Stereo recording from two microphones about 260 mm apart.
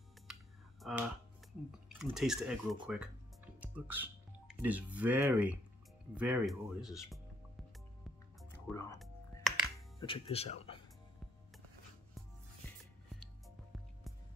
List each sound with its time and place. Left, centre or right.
0.3 s a sound: centre
2.1 s speech: centre
8.4 s music: centre
9.9 s speech: centre